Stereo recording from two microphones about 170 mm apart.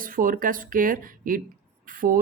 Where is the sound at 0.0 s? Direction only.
55° right (ahead or behind).